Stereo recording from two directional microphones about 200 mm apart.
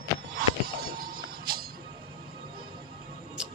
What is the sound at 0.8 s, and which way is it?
Music, 50° right (ahead or behind).